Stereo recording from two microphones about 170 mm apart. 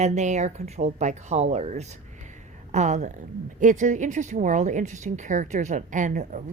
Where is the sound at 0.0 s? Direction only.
40° right (ahead or behind).